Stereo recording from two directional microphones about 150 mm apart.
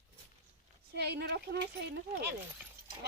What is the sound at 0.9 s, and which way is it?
Speech, 90° right.